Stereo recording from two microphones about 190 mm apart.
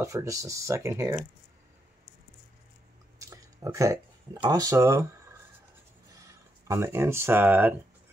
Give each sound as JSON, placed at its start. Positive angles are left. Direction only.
{"t": 0.0, "sound": "speech", "side_deg": -15}
{"t": 3.2, "sound": "speech", "side_deg": -15}
{"t": 6.1, "sound": "speech", "side_deg": -15}